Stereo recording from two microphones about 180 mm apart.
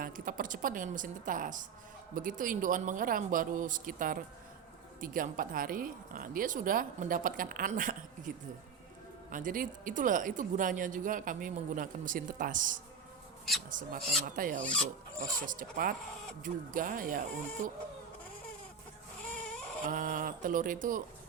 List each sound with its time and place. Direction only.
0.0 s speech: 50° right (ahead or behind)
9.3 s speech: 50° right (ahead or behind)
19.9 s speech: 50° right (ahead or behind)